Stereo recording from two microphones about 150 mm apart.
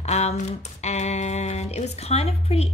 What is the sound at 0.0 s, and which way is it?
Speech, 45° left (ahead or behind).